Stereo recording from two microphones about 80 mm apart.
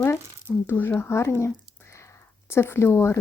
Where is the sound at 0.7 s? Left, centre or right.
Left.